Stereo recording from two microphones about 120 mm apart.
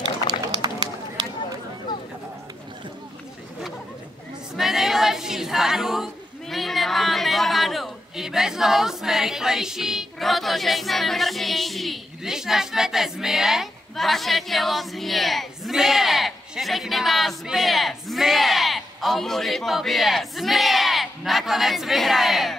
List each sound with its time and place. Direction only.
0.5 s run: 35° right (ahead or behind)
4.6 s choir: centre (ahead or behind)
6.5 s speech: centre (ahead or behind)